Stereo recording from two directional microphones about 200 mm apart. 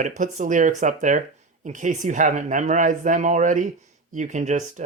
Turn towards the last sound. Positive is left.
turn(degrees=-35)  # may be behind; listen again after turning